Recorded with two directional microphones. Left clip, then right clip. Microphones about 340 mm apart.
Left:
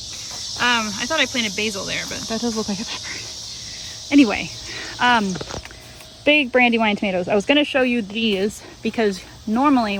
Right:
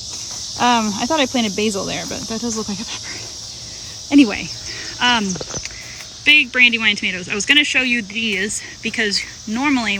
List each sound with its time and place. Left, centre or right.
0.6 s speech: centre
4.1 s speech: centre